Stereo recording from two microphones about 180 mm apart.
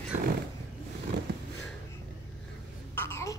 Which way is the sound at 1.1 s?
80° right.